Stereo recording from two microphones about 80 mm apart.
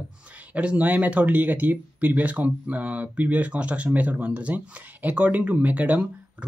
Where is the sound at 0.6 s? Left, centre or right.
Centre.